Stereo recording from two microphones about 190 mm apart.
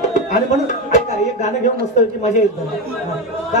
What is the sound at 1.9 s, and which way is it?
Speech, 35° left (ahead or behind).